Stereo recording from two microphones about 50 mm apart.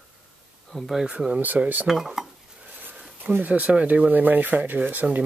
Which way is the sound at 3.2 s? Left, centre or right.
Right.